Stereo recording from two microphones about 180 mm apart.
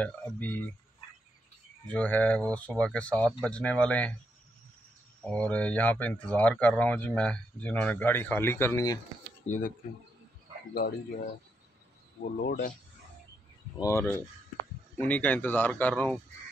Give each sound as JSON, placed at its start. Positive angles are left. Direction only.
{"t": 0.0, "sound": "speech", "side_deg": 10}
{"t": 1.9, "sound": "speech", "side_deg": 10}
{"t": 5.2, "sound": "speech", "side_deg": 5}
{"t": 9.5, "sound": "speech", "side_deg": 40}
{"t": 12.4, "sound": "speech", "side_deg": 50}
{"t": 13.7, "sound": "speech", "side_deg": 15}